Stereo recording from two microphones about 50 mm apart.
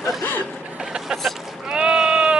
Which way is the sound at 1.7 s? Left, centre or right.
Centre.